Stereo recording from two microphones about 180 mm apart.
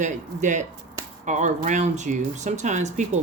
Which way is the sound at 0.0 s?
45° right (ahead or behind).